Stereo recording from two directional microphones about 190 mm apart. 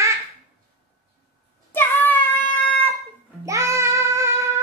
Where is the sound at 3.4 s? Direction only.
15° right (ahead or behind).